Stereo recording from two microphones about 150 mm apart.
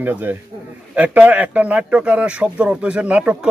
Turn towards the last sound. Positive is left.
turn(degrees=-10)  # may be behind; listen again after turning